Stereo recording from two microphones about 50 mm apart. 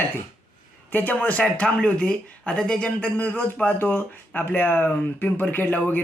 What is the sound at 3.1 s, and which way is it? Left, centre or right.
Speech, left.